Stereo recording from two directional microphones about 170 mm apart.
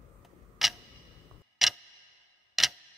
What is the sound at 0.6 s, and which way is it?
Tick-tock, centre (ahead or behind).